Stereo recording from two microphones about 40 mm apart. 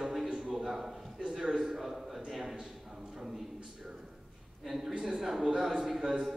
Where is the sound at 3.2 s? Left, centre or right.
Centre.